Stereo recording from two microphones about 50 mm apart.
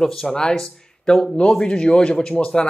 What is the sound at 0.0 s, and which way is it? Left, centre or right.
Speech, centre.